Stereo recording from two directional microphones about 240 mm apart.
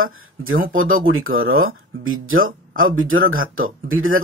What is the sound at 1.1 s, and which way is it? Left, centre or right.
Speech, right.